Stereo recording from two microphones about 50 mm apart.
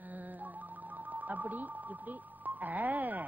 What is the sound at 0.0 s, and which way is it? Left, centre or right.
Music, right.